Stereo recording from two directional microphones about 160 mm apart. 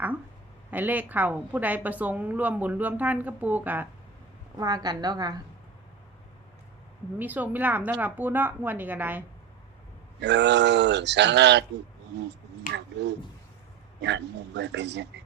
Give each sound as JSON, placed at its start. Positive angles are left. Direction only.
{"t": 0.7, "sound": "a woman's voice", "side_deg": -10}
{"t": 4.5, "sound": "a woman's voice", "side_deg": -25}
{"t": 7.2, "sound": "a woman's voice", "side_deg": -10}
{"t": 10.2, "sound": "speech", "side_deg": -90}
{"t": 12.7, "sound": "speech", "side_deg": -90}